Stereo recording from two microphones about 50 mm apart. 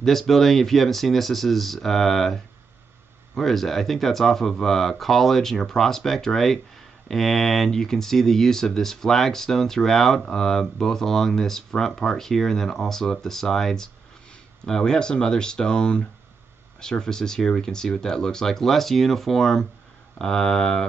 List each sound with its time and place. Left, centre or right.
0.0 s speech: centre